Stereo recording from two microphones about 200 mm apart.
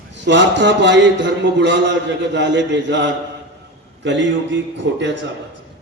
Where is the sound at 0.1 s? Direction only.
60° right (ahead or behind).